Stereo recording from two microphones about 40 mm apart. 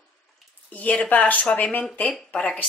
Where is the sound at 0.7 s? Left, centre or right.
Left.